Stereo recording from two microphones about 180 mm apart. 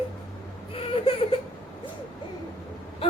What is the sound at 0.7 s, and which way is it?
Baby cry, 30° left (ahead or behind).